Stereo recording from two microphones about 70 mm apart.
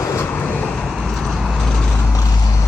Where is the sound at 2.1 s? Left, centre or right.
Left.